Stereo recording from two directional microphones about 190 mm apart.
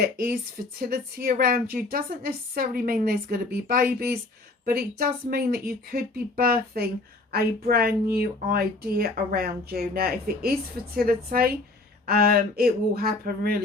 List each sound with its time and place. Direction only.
0.8 s speech: 55° right (ahead or behind)